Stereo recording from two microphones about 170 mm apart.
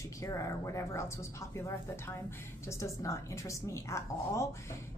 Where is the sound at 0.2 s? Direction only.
20° left (ahead or behind).